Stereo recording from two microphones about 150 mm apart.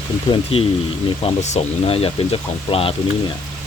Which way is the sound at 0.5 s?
40° left (ahead or behind).